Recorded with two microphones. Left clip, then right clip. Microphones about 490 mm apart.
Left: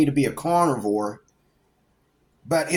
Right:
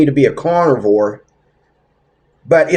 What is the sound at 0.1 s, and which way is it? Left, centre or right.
Speech, left.